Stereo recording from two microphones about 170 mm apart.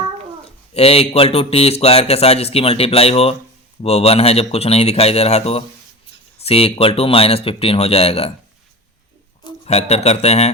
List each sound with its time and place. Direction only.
0.7 s speech: 35° left (ahead or behind)
9.6 s speech: 40° left (ahead or behind)